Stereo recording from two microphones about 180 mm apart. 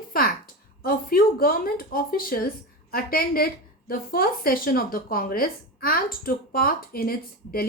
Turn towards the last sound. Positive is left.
turn(degrees=55)  # may be behind; listen again after turning